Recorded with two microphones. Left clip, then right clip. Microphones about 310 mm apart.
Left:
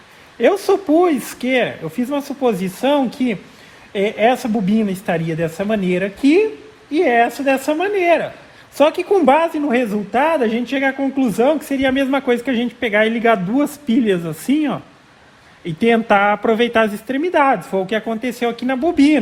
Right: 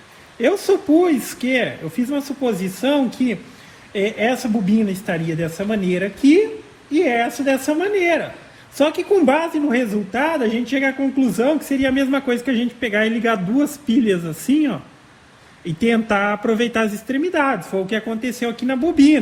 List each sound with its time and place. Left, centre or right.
0.4 s a woman's voice: left